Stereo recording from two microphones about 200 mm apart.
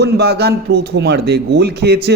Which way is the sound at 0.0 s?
55° right (ahead or behind).